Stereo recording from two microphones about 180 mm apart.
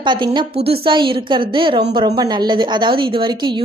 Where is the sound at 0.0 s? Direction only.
25° right (ahead or behind).